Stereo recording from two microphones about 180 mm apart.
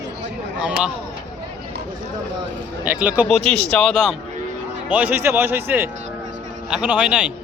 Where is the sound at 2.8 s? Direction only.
10° right (ahead or behind).